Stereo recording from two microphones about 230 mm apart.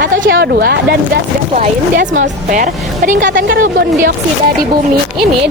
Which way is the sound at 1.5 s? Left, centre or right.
Right.